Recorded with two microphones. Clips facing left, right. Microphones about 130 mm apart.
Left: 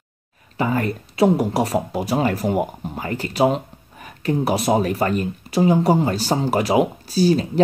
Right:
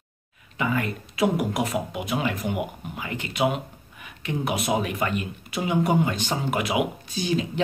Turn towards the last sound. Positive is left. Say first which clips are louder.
# left 8 dB
turn(degrees=40)  # may be behind; listen again after turning